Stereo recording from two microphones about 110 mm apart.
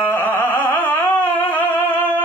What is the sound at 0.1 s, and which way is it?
Music, 20° left (ahead or behind).